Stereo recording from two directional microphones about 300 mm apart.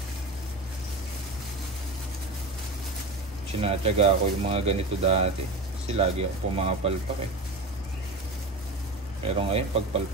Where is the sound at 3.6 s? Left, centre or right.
Centre.